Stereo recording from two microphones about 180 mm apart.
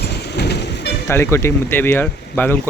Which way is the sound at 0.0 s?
65° left (ahead or behind).